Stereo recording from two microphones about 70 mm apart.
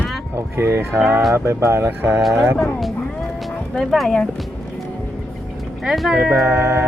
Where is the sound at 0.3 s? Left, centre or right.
Right.